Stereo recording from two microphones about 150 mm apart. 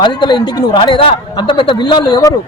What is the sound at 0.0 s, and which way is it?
Speech, 30° left (ahead or behind).